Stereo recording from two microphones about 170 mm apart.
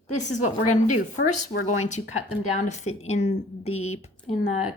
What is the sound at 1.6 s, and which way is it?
A woman's voice, 45° left (ahead or behind).